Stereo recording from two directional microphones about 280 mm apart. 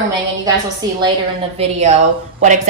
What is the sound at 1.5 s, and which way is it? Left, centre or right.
A woman's voice, right.